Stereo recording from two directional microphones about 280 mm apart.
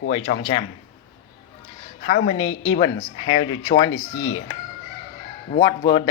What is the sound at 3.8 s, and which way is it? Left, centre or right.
Speech, left.